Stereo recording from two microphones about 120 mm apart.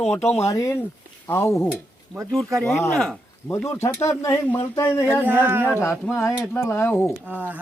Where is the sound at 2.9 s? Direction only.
Centre (ahead or behind).